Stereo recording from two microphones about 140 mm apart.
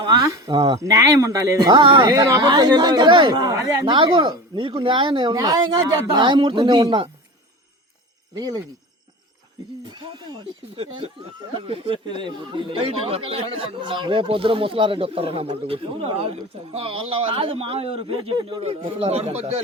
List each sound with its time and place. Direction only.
0.0 s speech: 25° right (ahead or behind)
2.1 s speech: 25° right (ahead or behind)
3.4 s speech: 20° right (ahead or behind)
3.8 s speech: 35° right (ahead or behind)
8.4 s speech: 30° right (ahead or behind)
9.8 s a man's voice: 30° right (ahead or behind); by 19.6 s 50° right (ahead or behind)